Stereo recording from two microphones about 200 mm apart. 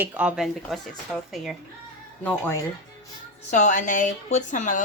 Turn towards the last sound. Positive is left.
turn(degrees=40)  # may be behind; listen again after turning